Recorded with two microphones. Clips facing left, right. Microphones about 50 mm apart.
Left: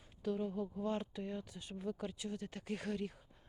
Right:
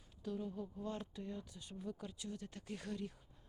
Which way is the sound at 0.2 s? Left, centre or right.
Left.